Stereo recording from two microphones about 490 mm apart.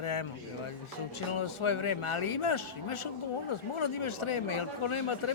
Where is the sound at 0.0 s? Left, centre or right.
Left.